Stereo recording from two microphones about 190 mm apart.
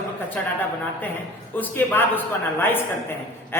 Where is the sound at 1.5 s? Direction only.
10° left (ahead or behind).